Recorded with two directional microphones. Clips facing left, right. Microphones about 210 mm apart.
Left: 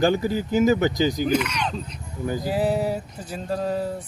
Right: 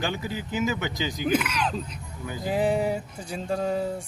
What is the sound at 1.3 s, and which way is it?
Speech, 5° right (ahead or behind).